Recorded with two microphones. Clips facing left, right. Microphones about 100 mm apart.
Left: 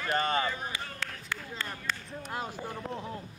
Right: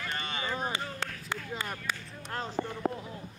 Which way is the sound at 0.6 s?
25° right (ahead or behind).